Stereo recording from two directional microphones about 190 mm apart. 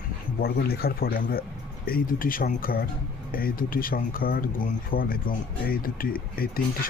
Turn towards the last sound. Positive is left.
turn(degrees=50)  # may be behind; listen again after turning